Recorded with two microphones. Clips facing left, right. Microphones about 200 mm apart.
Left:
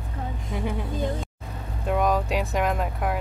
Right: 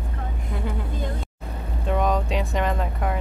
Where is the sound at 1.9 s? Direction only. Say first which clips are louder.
Even; 5° left (ahead or behind).